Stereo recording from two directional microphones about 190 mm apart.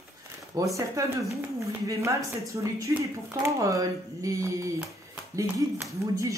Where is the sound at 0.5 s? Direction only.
15° right (ahead or behind).